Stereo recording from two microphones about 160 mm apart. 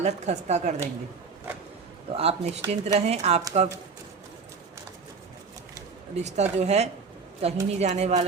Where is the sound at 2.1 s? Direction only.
40° right (ahead or behind).